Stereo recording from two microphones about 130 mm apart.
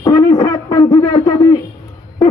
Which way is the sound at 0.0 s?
30° left (ahead or behind).